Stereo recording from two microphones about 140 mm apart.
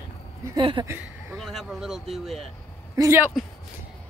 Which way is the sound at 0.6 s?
35° right (ahead or behind).